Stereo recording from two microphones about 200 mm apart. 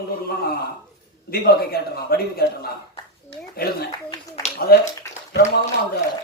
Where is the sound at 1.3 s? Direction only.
50° left (ahead or behind).